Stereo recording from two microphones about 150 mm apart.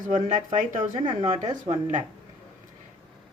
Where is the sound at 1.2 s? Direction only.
35° right (ahead or behind).